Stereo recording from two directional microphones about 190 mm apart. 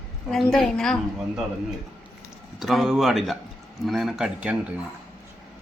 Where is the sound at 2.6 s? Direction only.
Centre (ahead or behind).